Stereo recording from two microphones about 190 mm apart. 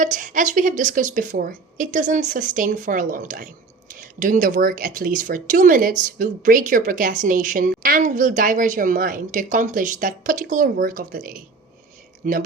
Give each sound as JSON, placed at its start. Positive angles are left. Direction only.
{"t": 0.0, "sound": "a woman's voice", "side_deg": -40}